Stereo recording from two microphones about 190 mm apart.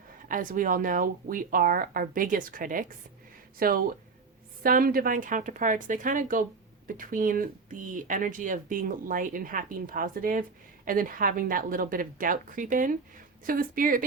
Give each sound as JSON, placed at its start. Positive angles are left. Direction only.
{"t": 0.3, "sound": "speech", "side_deg": -45}